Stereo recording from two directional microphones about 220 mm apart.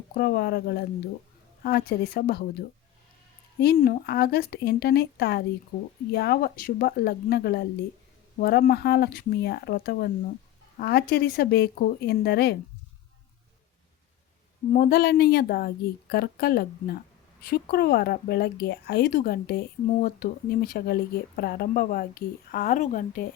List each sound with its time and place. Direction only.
0.1 s speech: 45° left (ahead or behind)
3.8 s speech: 45° left (ahead or behind)
14.7 s speech: 45° left (ahead or behind)